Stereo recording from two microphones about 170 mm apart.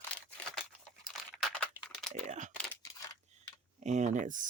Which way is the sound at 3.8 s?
45° right (ahead or behind).